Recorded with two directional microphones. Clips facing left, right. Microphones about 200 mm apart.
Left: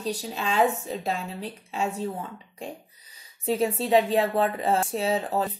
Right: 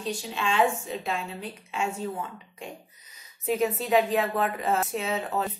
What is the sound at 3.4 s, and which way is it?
A woman's voice, 30° left (ahead or behind).